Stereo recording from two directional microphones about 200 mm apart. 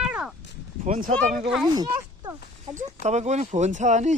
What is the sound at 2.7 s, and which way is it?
Speech, 35° right (ahead or behind).